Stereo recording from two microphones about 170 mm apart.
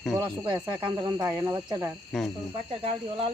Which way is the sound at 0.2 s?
25° right (ahead or behind).